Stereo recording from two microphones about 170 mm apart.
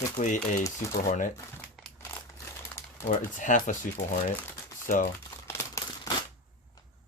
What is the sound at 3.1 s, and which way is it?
Speech, 50° left (ahead or behind).